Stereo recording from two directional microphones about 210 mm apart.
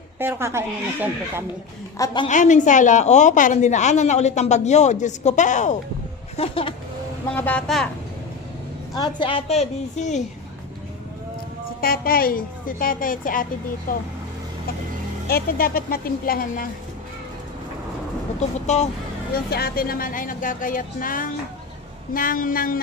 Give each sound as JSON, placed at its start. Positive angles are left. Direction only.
{"t": 0.2, "sound": "speech", "side_deg": -10}
{"t": 2.2, "sound": "a woman's voice", "side_deg": 35}
{"t": 7.3, "sound": "speech", "side_deg": 5}
{"t": 9.0, "sound": "a woman's voice", "side_deg": 20}
{"t": 11.8, "sound": "a woman's voice", "side_deg": 45}
{"t": 15.3, "sound": "a woman's voice", "side_deg": 45}
{"t": 18.3, "sound": "a woman's voice", "side_deg": 35}
{"t": 19.3, "sound": "a woman's voice", "side_deg": 45}